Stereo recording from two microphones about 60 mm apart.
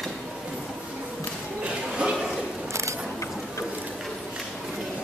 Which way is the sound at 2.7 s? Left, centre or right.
Right.